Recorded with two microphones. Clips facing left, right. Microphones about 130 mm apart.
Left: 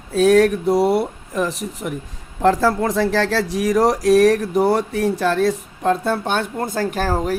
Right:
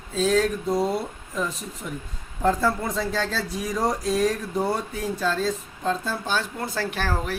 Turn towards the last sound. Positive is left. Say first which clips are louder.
# left 7 dB
turn(degrees=40)  # may be behind; listen again after turning